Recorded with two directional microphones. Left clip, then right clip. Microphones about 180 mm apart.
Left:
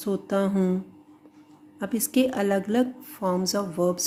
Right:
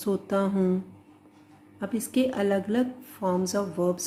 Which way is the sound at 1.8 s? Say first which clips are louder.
Left 3 dB; 35° left (ahead or behind).